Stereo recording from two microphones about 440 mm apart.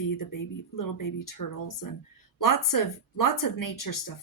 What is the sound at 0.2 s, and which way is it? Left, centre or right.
Speech, left.